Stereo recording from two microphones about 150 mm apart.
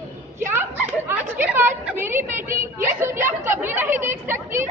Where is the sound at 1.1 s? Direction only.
15° right (ahead or behind).